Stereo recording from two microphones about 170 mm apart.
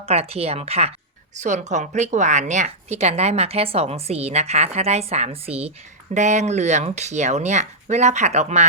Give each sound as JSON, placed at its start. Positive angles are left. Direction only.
{"t": 0.0, "sound": "speech", "side_deg": -35}